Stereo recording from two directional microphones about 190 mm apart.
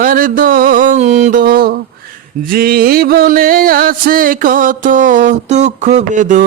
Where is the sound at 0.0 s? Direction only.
45° right (ahead or behind).